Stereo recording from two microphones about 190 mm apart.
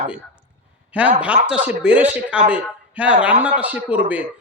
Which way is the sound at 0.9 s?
5° right (ahead or behind).